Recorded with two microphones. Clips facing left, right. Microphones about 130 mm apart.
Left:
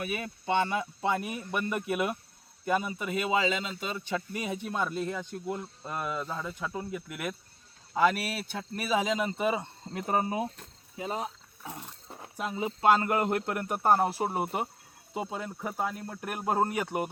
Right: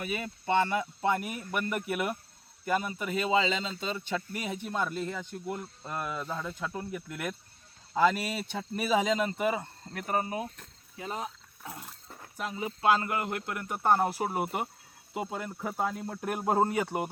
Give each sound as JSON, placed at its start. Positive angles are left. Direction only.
{"t": 0.0, "sound": "speech", "side_deg": 15}
{"t": 5.5, "sound": "speech", "side_deg": 5}
{"t": 12.0, "sound": "a sound", "side_deg": 20}
{"t": 12.9, "sound": "speech", "side_deg": 40}
{"t": 13.9, "sound": "speech", "side_deg": 5}
{"t": 15.1, "sound": "speech", "side_deg": 25}
{"t": 15.4, "sound": "speech", "side_deg": 0}